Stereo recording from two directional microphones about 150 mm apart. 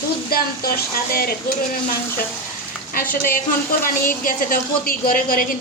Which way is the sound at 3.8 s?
70° left (ahead or behind).